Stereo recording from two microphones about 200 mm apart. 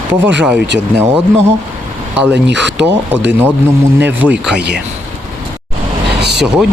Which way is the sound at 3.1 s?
10° right (ahead or behind).